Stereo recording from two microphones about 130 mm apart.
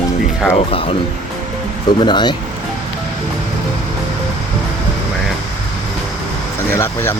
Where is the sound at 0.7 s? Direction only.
45° left (ahead or behind).